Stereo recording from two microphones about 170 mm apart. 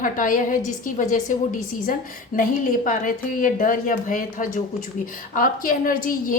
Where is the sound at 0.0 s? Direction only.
50° left (ahead or behind).